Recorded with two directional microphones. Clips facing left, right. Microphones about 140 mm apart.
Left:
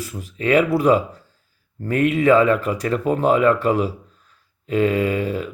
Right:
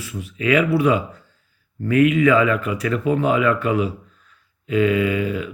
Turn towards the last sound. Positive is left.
turn(degrees=35)  # may be behind; listen again after turning